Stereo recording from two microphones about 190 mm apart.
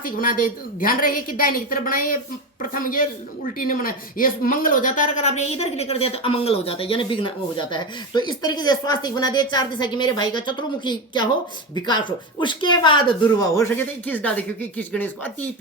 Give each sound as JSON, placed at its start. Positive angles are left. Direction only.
{"t": 0.0, "sound": "a woman's voice", "side_deg": 45}